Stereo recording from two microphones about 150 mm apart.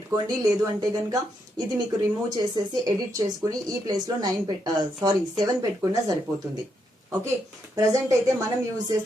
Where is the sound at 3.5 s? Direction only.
25° right (ahead or behind).